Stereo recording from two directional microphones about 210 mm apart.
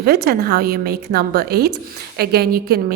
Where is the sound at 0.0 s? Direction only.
50° right (ahead or behind).